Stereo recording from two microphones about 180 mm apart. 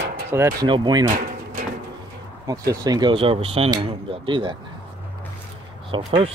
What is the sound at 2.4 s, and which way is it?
Speech, 20° right (ahead or behind).